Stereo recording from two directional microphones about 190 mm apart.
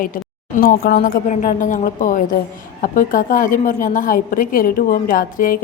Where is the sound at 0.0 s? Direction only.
45° left (ahead or behind).